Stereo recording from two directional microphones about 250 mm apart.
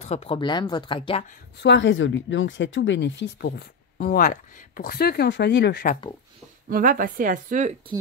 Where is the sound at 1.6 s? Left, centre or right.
Left.